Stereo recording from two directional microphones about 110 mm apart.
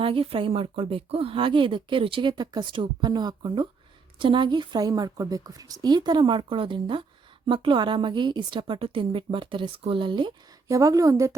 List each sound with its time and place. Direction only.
0.0 s speech: 55° right (ahead or behind)
10.7 s speech: 30° right (ahead or behind)